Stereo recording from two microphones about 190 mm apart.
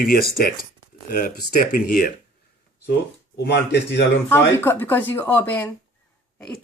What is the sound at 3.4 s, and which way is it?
Speech, 65° left (ahead or behind).